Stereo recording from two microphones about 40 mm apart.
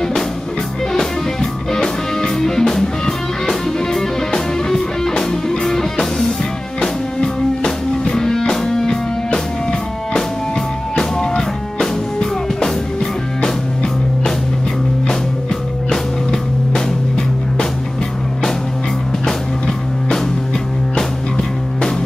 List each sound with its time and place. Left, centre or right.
0.9 s music: centre
15.9 s music: centre
20.9 s music: centre